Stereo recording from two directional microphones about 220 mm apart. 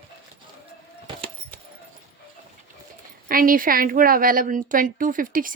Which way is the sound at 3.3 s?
40° right (ahead or behind).